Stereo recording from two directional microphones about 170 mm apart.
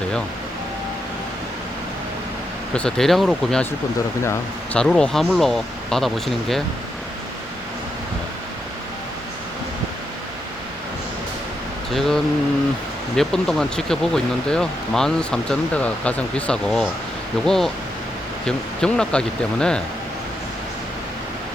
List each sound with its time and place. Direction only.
2.7 s speech: 5° left (ahead or behind)
4.2 s speech: 15° left (ahead or behind)
4.8 s speech: 5° left (ahead or behind)
11.9 s speech: centre (ahead or behind)